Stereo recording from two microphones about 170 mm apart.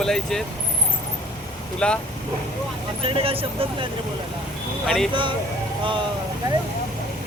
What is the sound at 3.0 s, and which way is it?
Speech, 35° right (ahead or behind).